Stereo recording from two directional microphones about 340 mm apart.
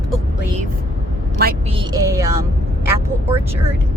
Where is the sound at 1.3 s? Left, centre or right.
Right; by 2.3 s centre.